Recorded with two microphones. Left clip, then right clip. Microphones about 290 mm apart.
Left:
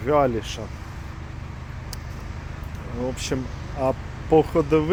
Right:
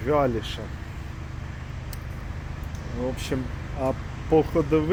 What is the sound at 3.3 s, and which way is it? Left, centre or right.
Speech, centre.